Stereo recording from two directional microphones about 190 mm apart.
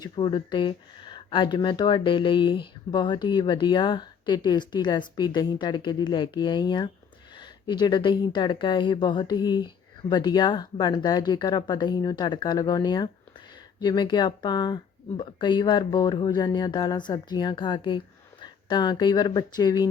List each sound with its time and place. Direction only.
0.0 s speech: 25° left (ahead or behind)